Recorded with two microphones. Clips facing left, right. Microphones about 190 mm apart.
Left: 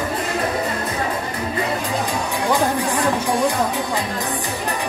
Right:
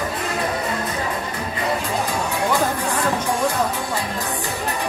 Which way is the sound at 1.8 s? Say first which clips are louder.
Even; 15° left (ahead or behind).